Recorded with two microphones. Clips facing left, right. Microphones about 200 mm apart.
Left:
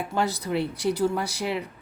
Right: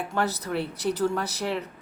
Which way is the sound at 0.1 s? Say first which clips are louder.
Left 2 dB; 15° left (ahead or behind).